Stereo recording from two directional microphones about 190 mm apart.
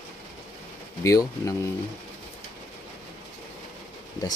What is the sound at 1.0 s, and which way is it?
Speech, 15° left (ahead or behind).